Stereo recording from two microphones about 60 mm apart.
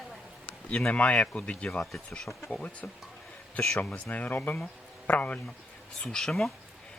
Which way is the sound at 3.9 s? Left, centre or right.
Left.